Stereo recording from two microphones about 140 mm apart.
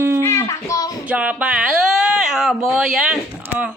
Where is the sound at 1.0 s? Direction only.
10° right (ahead or behind).